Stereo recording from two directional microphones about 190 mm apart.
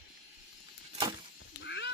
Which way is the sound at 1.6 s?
65° left (ahead or behind).